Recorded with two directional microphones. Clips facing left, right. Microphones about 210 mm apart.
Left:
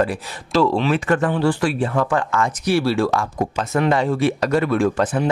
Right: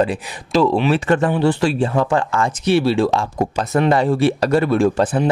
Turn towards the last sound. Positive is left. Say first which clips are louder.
# right 3 dB
turn(degrees=-30)  # may be behind; listen again after turning